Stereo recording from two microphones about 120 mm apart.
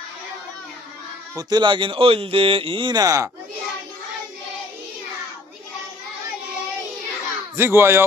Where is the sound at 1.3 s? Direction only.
35° right (ahead or behind).